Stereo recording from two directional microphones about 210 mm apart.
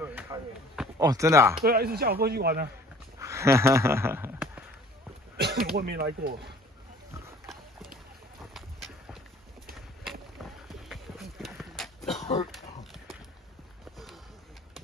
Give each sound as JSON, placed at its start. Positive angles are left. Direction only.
{"t": 0.0, "sound": "a sound", "side_deg": -10}
{"t": 1.6, "sound": "speech", "side_deg": -45}
{"t": 3.2, "sound": "speech", "side_deg": -15}
{"t": 5.4, "sound": "speech", "side_deg": -45}
{"t": 8.5, "sound": "clip-clop", "side_deg": 0}
{"t": 10.4, "sound": "a sound", "side_deg": 0}